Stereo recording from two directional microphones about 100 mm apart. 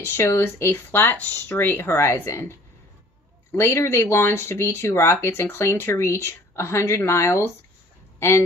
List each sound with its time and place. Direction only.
0.0 s speech: 25° left (ahead or behind)
3.5 s speech: 25° left (ahead or behind)